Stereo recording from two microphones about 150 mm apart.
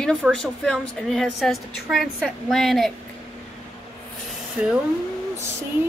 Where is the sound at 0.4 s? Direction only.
Centre (ahead or behind).